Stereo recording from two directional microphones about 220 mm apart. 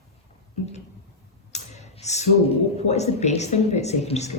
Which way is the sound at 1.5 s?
30° left (ahead or behind).